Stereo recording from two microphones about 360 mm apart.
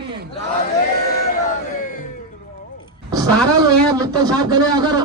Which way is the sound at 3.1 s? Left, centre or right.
Centre.